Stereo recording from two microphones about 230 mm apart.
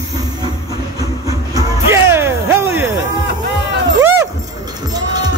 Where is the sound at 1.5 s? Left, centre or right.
Centre.